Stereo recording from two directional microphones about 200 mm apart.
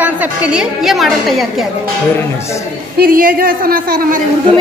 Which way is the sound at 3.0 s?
45° right (ahead or behind).